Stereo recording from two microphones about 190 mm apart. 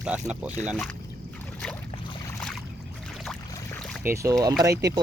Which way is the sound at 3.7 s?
5° left (ahead or behind).